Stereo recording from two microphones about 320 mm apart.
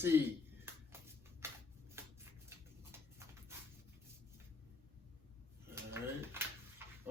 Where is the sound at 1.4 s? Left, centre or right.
Centre.